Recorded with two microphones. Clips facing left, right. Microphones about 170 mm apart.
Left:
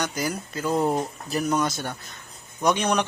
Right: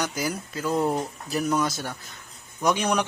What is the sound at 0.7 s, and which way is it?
Speech, 15° left (ahead or behind).